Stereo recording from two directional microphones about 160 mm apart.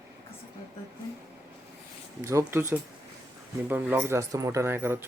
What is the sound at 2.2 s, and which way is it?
Speech, 20° right (ahead or behind).